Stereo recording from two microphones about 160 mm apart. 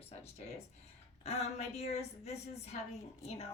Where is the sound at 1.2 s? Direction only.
40° left (ahead or behind).